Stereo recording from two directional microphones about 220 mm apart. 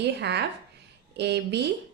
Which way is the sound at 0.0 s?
50° right (ahead or behind).